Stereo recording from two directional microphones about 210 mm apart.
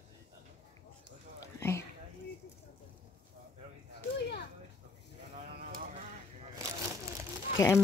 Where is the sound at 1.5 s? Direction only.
10° left (ahead or behind).